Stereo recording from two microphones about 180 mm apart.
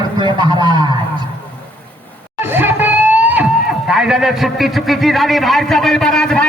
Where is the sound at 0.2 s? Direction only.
25° right (ahead or behind).